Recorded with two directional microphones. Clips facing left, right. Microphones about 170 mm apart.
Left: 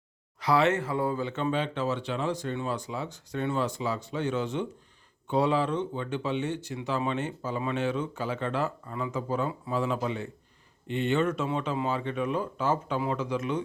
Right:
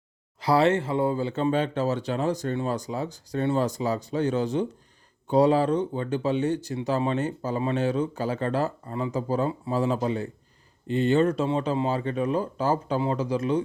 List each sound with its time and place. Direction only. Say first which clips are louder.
0.3 s speech: right 3 dB; 30° right (ahead or behind)